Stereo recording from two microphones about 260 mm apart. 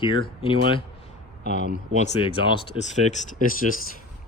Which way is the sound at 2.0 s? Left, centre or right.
Left.